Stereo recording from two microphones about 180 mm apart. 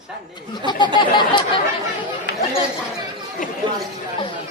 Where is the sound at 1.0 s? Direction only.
25° left (ahead or behind).